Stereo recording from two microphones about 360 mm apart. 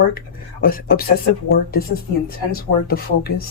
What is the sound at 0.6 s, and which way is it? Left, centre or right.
Speech, left.